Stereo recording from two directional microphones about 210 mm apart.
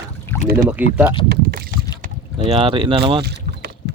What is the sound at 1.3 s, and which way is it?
Rowboat, 50° right (ahead or behind).